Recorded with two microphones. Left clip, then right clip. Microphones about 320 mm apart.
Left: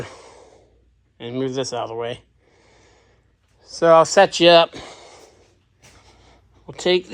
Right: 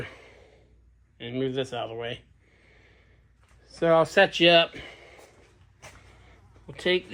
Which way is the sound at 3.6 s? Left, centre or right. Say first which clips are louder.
Left 8 dB; centre.